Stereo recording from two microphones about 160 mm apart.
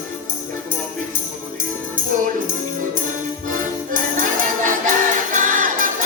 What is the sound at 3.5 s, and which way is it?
Music, 55° right (ahead or behind).